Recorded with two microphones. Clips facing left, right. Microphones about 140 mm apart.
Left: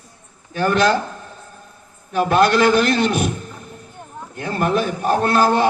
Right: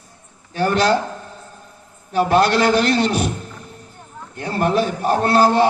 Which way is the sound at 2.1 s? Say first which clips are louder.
Even; 50° left (ahead or behind).